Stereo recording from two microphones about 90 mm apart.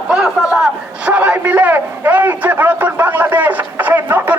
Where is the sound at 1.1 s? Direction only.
15° right (ahead or behind).